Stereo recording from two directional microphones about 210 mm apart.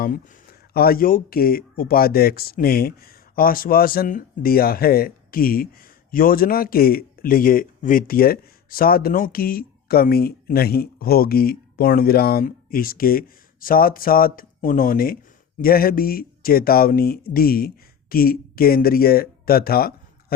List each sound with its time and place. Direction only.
0.7 s speech: 45° left (ahead or behind)